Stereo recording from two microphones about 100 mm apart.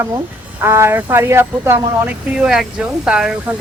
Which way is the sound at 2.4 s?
5° right (ahead or behind).